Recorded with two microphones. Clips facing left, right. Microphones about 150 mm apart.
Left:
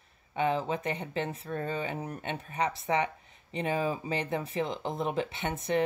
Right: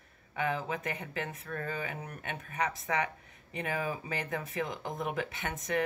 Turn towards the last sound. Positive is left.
turn(degrees=30)  # may be behind; listen again after turning